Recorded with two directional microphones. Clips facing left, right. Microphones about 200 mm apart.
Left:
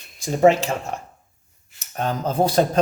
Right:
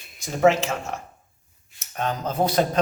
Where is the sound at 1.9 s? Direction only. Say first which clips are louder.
Left 3 dB; 35° left (ahead or behind).